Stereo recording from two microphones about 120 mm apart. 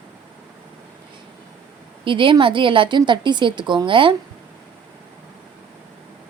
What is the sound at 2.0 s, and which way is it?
A woman's voice, 45° right (ahead or behind).